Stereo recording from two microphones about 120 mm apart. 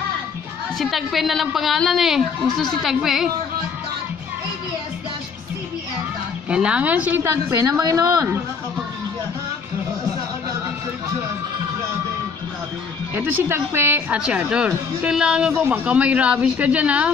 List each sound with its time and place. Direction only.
0.7 s speech: centre (ahead or behind)
6.5 s speech: 10° right (ahead or behind)
7.5 s a woman's voice: 30° right (ahead or behind)
13.1 s a woman's voice: 20° right (ahead or behind)
14.1 s speech: 10° right (ahead or behind)